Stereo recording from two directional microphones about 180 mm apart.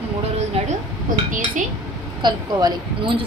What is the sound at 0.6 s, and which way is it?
Speech, 30° right (ahead or behind).